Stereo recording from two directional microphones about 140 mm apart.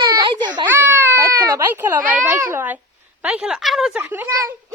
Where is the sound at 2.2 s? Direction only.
15° right (ahead or behind).